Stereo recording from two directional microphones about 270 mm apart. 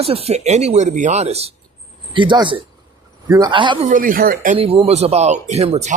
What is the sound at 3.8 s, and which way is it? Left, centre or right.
A man's voice, right.